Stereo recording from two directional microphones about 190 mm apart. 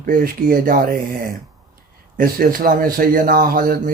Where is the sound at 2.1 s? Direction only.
45° right (ahead or behind).